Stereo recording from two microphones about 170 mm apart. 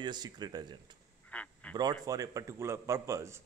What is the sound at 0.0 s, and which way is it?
Speech, 25° right (ahead or behind).